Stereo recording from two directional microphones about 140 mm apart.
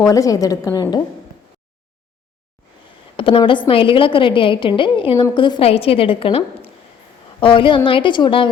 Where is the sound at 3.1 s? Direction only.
40° left (ahead or behind).